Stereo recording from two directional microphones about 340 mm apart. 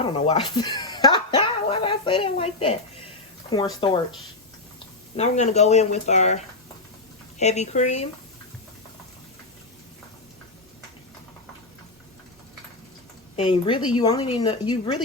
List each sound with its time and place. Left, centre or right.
0.0 s speech: centre
5.1 s speech: centre
13.3 s speech: centre